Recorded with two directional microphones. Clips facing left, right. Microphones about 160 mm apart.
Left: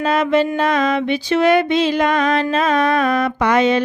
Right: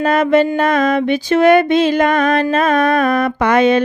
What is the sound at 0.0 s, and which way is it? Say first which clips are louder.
Mantra: right 3 dB; 50° right (ahead or behind).